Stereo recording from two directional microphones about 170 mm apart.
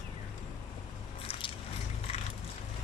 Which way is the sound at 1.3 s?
30° left (ahead or behind).